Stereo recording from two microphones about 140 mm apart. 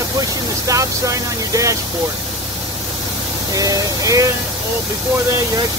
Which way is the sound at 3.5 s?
25° right (ahead or behind).